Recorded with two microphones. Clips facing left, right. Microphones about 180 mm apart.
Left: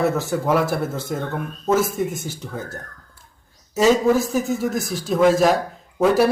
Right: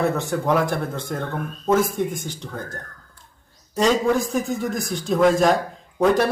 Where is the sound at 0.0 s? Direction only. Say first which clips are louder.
Left 1 dB; centre (ahead or behind).